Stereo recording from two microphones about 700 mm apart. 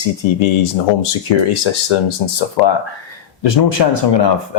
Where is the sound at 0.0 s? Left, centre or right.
Left.